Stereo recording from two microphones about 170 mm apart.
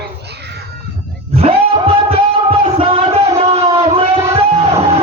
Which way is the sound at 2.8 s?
35° right (ahead or behind).